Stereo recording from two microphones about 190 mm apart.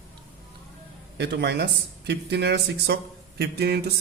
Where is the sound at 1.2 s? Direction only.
60° right (ahead or behind).